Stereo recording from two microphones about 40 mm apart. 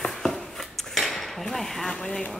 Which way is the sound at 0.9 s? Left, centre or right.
Centre.